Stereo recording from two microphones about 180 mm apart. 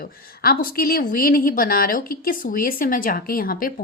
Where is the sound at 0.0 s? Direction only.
55° left (ahead or behind).